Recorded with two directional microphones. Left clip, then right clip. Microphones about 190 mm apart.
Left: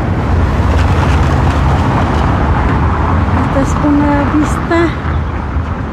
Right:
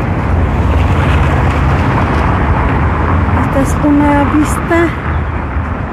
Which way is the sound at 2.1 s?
65° left (ahead or behind).